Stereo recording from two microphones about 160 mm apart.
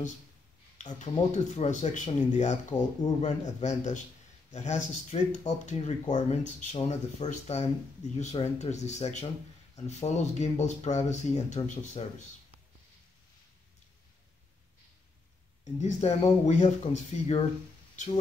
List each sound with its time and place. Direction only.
0.7 s speech: 50° left (ahead or behind)
2.7 s speech: 30° left (ahead or behind)
3.2 s speech: 45° left (ahead or behind)
15.8 s speech: 45° left (ahead or behind)